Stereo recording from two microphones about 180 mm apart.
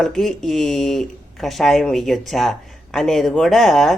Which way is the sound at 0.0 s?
Centre (ahead or behind).